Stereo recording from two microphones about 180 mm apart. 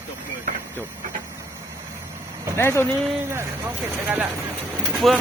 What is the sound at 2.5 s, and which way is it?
Speech, 10° left (ahead or behind).